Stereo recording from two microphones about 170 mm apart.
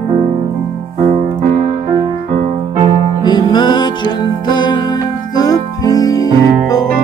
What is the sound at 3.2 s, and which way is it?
Music, 25° left (ahead or behind).